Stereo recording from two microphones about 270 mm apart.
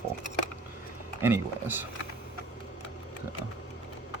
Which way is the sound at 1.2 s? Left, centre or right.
Centre.